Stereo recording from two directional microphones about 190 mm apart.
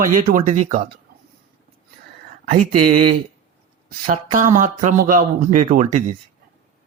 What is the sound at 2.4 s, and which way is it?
Speech, 45° right (ahead or behind).